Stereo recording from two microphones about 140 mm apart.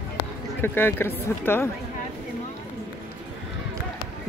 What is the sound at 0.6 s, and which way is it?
Speech, 15° left (ahead or behind).